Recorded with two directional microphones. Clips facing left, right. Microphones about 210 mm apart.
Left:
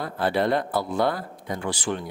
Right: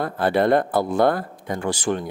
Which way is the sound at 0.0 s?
50° right (ahead or behind).